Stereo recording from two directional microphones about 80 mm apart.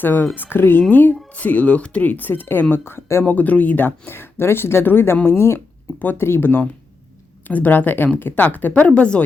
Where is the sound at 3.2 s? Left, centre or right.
Centre.